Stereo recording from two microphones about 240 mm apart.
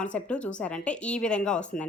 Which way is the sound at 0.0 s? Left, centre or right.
Centre.